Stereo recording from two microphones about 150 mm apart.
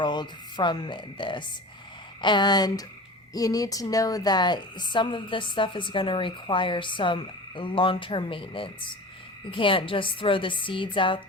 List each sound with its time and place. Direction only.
0.0 s a woman's voice: 30° left (ahead or behind)